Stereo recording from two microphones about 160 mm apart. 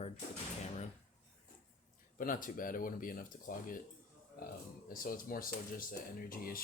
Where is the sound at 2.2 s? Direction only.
60° left (ahead or behind).